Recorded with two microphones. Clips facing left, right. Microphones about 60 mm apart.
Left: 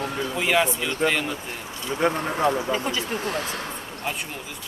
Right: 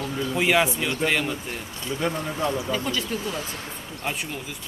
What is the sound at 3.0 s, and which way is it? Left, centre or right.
Speech, left.